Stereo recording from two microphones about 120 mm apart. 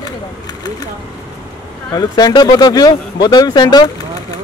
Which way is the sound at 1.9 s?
35° left (ahead or behind).